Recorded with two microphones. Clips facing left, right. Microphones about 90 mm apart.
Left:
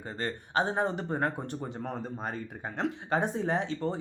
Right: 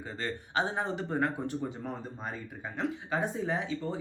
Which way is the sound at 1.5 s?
55° left (ahead or behind).